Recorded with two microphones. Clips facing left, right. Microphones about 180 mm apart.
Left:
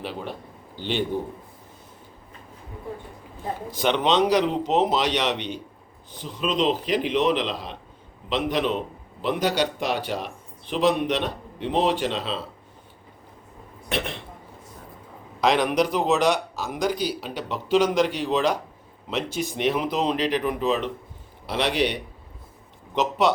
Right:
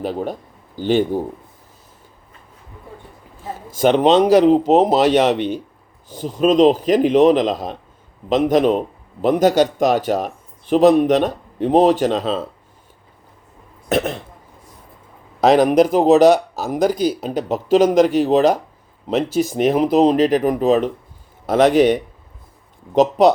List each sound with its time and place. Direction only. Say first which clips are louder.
0.0 s speech: right 9 dB; 45° right (ahead or behind)
3.7 s speech: right 9 dB; 45° right (ahead or behind)
13.9 s speech: right 9 dB; 45° right (ahead or behind)
15.4 s speech: right 8 dB; 45° right (ahead or behind)
23.0 s speech: right 10 dB; 45° right (ahead or behind)